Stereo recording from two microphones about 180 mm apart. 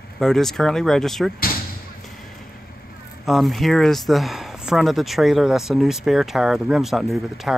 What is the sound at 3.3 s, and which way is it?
Speech, centre (ahead or behind).